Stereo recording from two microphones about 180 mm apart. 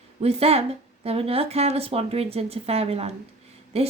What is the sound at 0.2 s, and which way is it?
Speech, 35° right (ahead or behind).